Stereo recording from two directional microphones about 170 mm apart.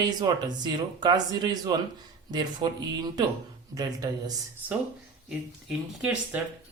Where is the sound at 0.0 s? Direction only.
25° right (ahead or behind).